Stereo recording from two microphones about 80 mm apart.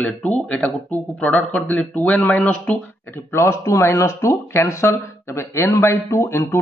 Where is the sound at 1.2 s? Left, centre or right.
Centre.